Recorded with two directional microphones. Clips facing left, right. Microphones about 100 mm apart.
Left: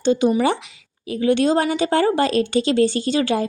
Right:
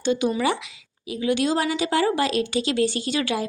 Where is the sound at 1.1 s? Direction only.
40° left (ahead or behind).